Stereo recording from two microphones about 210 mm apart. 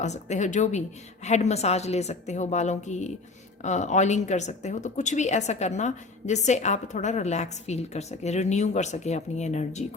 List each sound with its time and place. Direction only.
0.0 s speech: 35° left (ahead or behind)